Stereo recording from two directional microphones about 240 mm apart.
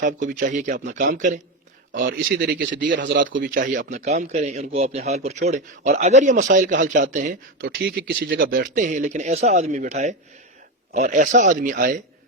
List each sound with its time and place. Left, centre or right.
0.0 s a man's voice: right
3.5 s a man's voice: right